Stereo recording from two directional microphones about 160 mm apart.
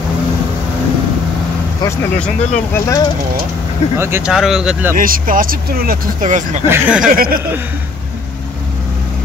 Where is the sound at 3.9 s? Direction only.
15° right (ahead or behind).